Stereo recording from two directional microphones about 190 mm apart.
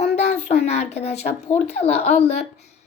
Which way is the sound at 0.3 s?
35° left (ahead or behind).